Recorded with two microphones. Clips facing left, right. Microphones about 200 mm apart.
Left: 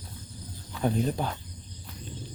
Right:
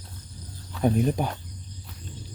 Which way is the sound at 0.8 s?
15° right (ahead or behind).